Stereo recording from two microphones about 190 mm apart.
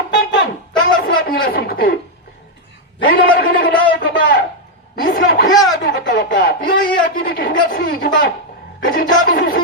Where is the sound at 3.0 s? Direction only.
50° left (ahead or behind).